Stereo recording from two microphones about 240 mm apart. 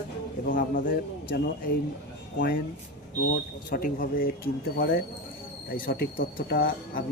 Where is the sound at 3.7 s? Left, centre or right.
Left.